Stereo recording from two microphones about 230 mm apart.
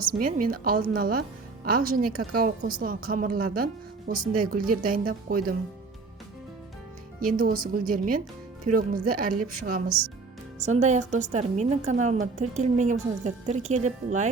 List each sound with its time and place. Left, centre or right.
0.0 s a woman's voice: right
7.2 s a woman's voice: right